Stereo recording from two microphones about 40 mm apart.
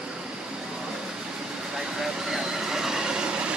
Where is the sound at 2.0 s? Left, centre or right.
Centre; by 3.5 s right.